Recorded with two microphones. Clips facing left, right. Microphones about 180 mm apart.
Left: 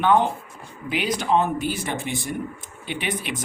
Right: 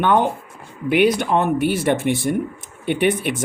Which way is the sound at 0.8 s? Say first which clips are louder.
Right 7 dB; 60° right (ahead or behind).